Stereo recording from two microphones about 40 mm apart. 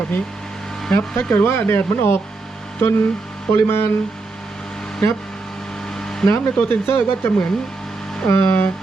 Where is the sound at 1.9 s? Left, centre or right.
Left.